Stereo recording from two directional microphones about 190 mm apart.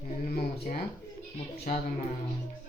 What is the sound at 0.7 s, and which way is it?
Speech, 45° left (ahead or behind).